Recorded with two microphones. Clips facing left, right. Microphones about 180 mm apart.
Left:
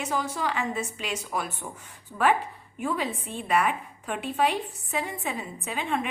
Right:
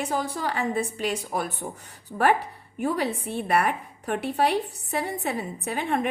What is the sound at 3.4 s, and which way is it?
A woman's voice, 40° right (ahead or behind).